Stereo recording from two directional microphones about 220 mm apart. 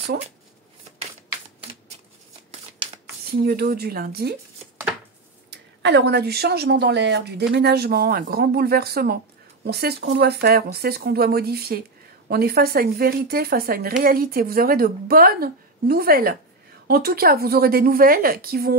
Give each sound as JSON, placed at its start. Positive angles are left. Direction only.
{"t": 3.4, "sound": "a woman's voice", "side_deg": -45}
{"t": 5.5, "sound": "a woman's voice", "side_deg": -50}